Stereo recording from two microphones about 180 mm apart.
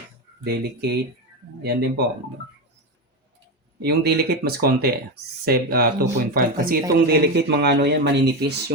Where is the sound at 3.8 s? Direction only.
65° right (ahead or behind).